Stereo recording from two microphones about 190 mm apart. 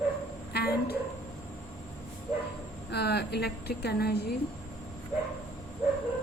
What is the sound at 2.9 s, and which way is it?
A woman's voice, 60° left (ahead or behind).